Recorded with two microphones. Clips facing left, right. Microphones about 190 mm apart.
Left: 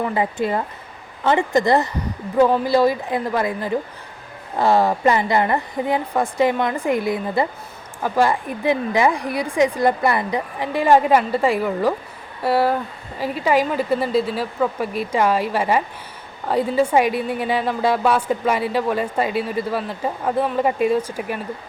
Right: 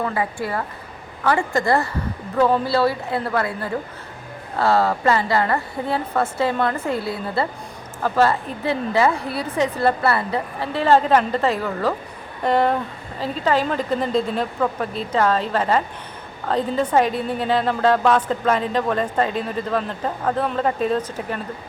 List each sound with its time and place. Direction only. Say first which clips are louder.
0.0 s a woman's voice: left 3 dB; 20° left (ahead or behind)